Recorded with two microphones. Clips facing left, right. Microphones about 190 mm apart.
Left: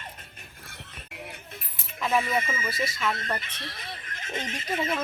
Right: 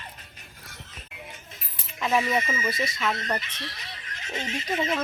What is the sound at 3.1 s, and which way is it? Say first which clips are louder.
Speech: right 2 dB; 50° left (ahead or behind).